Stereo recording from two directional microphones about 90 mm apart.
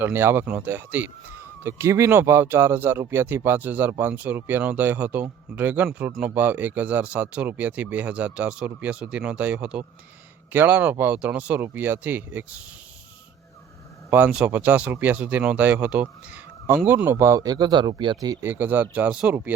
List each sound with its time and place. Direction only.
0.0 s speech: 25° right (ahead or behind)
14.1 s speech: 15° right (ahead or behind); by 18.2 s 60° right (ahead or behind)
18.2 s speech: 40° right (ahead or behind)
18.4 s speech: 25° right (ahead or behind)